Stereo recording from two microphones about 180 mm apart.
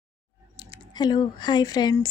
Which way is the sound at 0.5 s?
25° left (ahead or behind).